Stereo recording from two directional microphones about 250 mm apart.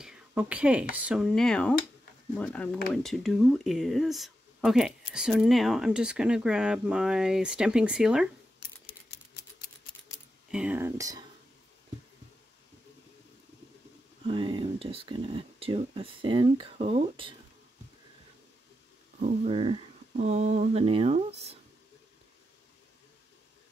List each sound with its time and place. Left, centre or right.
0.0 s a sound: centre
0.9 s speech: centre
8.8 s typewriter: left
10.5 s speech: centre
14.2 s speech: centre
19.1 s speech: right